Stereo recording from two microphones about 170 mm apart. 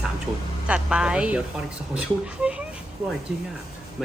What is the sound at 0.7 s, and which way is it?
Speech, 5° right (ahead or behind).